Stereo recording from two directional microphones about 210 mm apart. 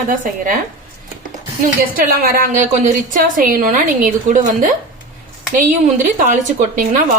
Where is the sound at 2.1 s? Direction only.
45° right (ahead or behind).